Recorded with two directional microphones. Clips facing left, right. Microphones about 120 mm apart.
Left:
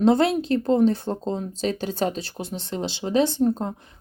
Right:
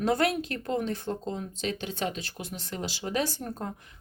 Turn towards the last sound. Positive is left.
turn(degrees=25)  # may be behind; listen again after turning